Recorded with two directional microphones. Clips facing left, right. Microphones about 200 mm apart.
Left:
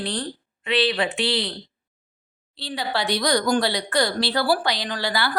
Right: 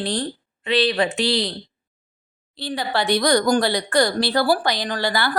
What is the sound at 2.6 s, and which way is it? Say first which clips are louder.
A woman's voice: right 3 dB; 50° right (ahead or behind).